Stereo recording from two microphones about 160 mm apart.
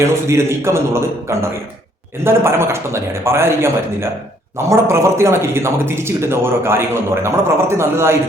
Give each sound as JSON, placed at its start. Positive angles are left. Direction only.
{"t": 0.0, "sound": "a man's voice", "side_deg": -15}